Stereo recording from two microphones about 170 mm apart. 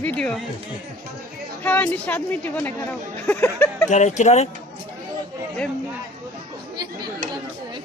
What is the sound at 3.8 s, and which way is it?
Speech, 45° left (ahead or behind).